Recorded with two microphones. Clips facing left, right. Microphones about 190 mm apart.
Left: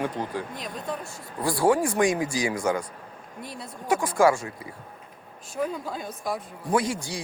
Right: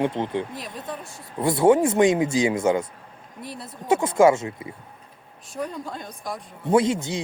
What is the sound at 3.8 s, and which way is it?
Speech, 25° right (ahead or behind).